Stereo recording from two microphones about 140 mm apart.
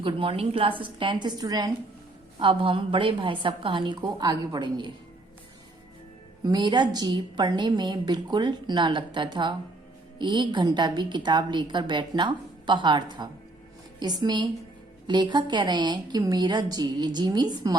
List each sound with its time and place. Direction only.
0.0 s a woman's voice: 40° right (ahead or behind)
2.4 s a woman's voice: 40° right (ahead or behind)
6.4 s a woman's voice: 30° right (ahead or behind)